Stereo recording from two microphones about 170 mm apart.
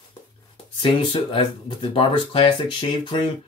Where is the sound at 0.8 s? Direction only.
30° left (ahead or behind).